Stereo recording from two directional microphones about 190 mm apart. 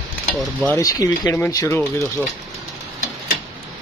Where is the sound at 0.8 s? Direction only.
20° left (ahead or behind).